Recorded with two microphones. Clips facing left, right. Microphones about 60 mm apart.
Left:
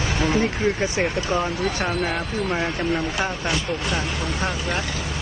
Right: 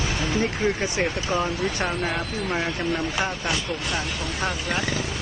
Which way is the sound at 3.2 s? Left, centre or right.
Left.